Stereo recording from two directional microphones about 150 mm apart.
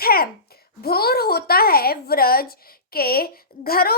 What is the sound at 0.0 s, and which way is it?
A child's voice, 90° left.